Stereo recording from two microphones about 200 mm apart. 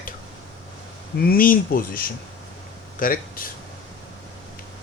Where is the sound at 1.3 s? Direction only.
45° left (ahead or behind).